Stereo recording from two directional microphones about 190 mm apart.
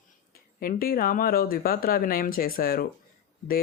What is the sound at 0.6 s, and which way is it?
Speech, 50° left (ahead or behind).